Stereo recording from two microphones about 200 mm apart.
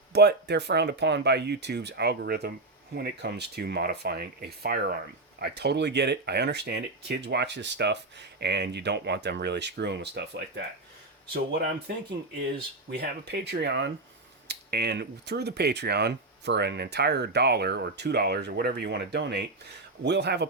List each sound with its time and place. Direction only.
0.1 s speech: 55° right (ahead or behind)
12.9 s speech: 55° right (ahead or behind)